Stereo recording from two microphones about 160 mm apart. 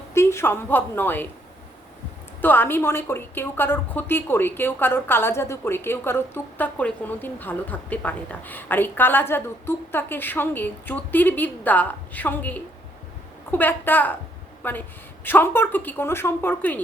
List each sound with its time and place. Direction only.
0.1 s a woman's voice: 15° left (ahead or behind)
2.4 s a woman's voice: 10° left (ahead or behind)